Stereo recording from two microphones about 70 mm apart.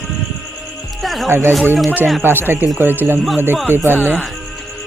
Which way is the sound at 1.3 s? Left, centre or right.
Right.